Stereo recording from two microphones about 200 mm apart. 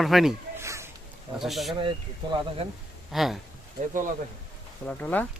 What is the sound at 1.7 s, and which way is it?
Speech, 25° right (ahead or behind).